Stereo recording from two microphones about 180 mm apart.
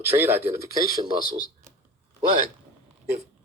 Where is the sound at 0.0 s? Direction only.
10° right (ahead or behind).